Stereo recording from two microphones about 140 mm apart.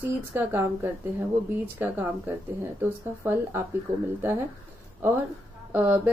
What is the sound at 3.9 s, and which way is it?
Speech, 60° right (ahead or behind).